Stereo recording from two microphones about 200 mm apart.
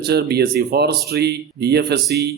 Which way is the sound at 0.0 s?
55° right (ahead or behind).